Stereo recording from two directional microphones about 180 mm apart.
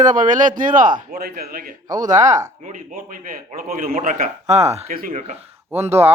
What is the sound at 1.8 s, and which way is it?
Speech, 20° right (ahead or behind).